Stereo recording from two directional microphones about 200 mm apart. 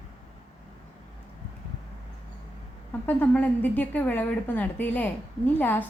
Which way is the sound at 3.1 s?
10° left (ahead or behind).